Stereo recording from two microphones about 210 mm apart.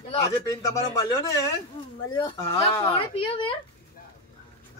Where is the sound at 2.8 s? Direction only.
20° left (ahead or behind).